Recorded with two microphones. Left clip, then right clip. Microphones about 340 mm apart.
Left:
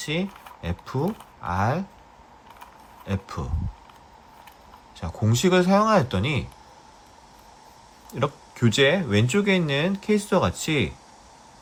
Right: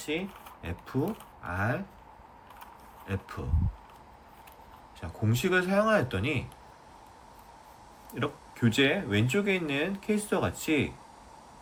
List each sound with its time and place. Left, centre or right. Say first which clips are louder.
0.6 s speech: left 5 dB; centre
4.9 s speech: left 6 dB; centre
8.2 s speech: left 6 dB; centre